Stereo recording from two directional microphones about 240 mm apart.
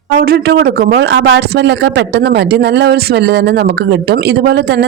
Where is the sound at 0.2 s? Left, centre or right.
Right.